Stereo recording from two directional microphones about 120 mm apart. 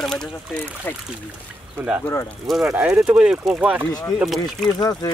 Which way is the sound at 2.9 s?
20° right (ahead or behind).